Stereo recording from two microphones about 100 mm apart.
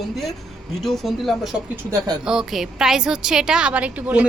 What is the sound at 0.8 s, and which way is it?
A woman's voice, centre (ahead or behind).